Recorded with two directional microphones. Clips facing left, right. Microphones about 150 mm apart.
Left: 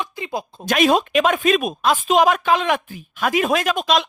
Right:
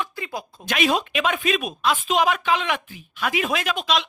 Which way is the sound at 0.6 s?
45° left (ahead or behind).